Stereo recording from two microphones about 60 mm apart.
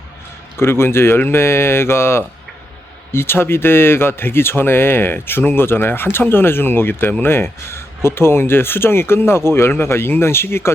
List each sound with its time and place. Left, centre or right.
0.5 s speech: left